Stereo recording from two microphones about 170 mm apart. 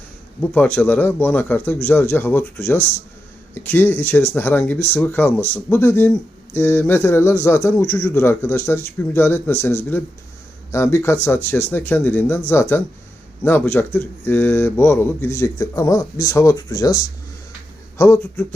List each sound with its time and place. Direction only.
0.5 s speech: 10° left (ahead or behind)